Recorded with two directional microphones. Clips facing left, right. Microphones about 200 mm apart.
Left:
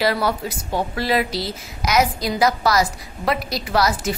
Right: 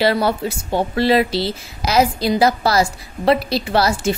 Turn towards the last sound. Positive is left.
turn(degrees=-30)  # may be behind; listen again after turning